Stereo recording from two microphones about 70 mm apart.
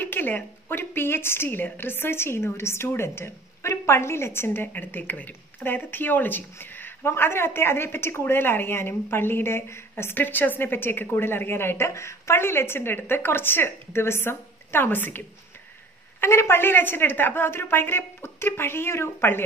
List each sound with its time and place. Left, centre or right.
0.0 s a woman's voice: left